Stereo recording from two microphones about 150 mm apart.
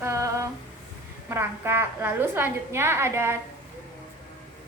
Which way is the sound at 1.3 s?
15° right (ahead or behind).